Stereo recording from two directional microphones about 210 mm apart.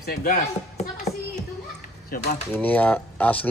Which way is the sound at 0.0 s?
45° left (ahead or behind).